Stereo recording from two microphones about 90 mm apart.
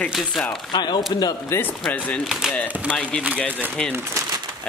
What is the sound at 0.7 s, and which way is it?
Speech, 55° left (ahead or behind).